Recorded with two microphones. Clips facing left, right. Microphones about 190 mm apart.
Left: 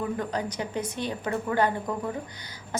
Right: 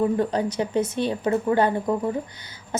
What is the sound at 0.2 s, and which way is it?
A woman's voice, 25° right (ahead or behind).